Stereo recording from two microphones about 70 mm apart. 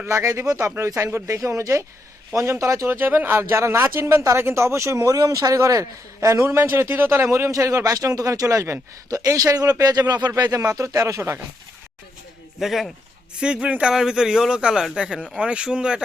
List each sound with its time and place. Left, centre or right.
0.1 s speech: right
6.4 s speech: right
9.0 s speech: right
10.5 s speech: right
12.5 s speech: centre
13.4 s a man's voice: centre